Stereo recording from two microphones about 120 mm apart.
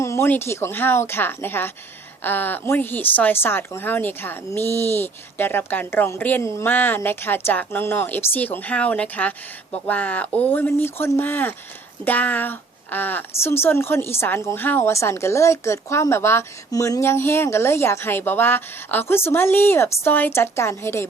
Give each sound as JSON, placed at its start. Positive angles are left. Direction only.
{"t": 0.0, "sound": "speech", "side_deg": 20}